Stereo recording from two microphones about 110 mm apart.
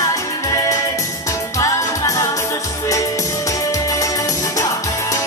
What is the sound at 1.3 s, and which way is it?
Music, 30° left (ahead or behind).